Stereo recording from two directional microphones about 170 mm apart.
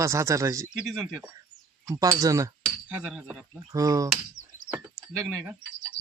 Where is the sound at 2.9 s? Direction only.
5° right (ahead or behind).